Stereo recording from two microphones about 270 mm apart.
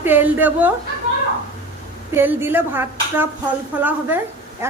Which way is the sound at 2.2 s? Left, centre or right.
Centre.